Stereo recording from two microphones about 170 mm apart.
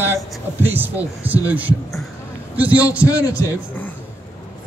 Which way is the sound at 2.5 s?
10° right (ahead or behind).